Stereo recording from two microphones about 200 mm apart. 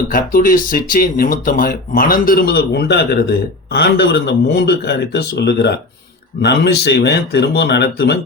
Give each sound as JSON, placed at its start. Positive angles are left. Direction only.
{"t": 0.1, "sound": "speech", "side_deg": 45}